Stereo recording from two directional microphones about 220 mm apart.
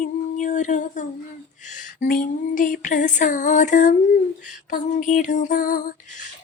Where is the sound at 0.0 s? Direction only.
35° left (ahead or behind).